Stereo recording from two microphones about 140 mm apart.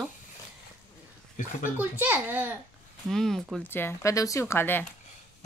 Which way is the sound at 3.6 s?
15° left (ahead or behind).